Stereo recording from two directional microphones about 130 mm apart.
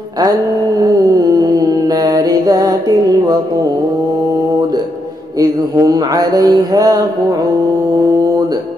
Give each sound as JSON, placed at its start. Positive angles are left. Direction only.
{"t": 0.2, "sound": "mantra", "side_deg": -30}
{"t": 5.4, "sound": "mantra", "side_deg": -30}